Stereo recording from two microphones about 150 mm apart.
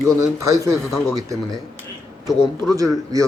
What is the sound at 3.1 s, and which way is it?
Speech, 25° right (ahead or behind).